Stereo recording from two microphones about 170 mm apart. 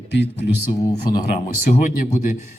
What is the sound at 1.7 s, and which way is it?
Speech, 50° left (ahead or behind).